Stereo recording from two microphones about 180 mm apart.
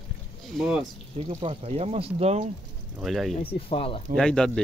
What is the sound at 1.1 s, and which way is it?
Speech, 35° right (ahead or behind).